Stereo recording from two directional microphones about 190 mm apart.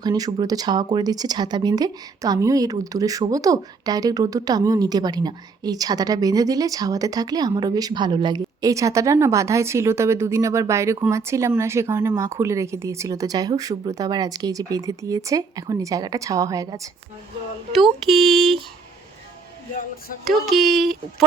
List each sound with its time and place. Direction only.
0.0 s speech: 20° right (ahead or behind)
18.1 s speech: centre (ahead or behind)
20.2 s speech: centre (ahead or behind)